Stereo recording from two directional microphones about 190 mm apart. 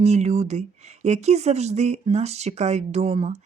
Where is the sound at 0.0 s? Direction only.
35° right (ahead or behind).